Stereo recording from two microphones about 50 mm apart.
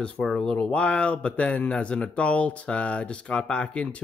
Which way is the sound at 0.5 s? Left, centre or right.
Left.